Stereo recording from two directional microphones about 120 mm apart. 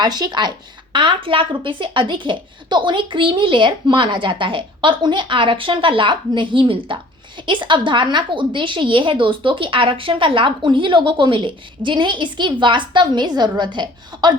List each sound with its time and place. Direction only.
0.0 s a woman's voice: 35° right (ahead or behind)